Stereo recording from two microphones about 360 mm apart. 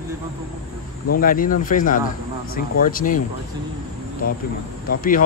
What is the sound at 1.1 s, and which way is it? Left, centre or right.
Speech, left.